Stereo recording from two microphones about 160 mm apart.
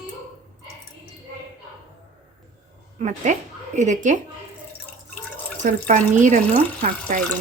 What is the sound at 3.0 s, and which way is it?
A woman's voice, 45° right (ahead or behind).